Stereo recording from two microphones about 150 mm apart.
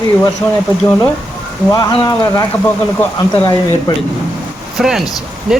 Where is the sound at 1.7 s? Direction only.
25° left (ahead or behind).